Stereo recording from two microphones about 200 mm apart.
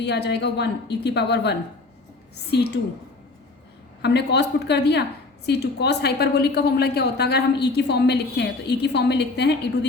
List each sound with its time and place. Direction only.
0.0 s a woman's voice: 55° left (ahead or behind)
4.0 s a woman's voice: 55° left (ahead or behind)